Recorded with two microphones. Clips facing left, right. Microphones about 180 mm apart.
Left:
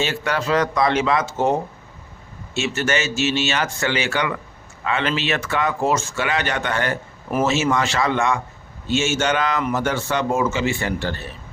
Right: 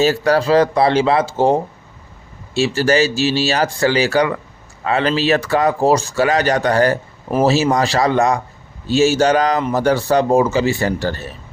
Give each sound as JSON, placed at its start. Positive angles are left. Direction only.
{"t": 0.0, "sound": "speech", "side_deg": -35}
{"t": 2.6, "sound": "speech", "side_deg": -35}